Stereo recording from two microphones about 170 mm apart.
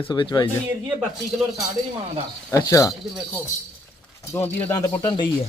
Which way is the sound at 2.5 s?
20° left (ahead or behind).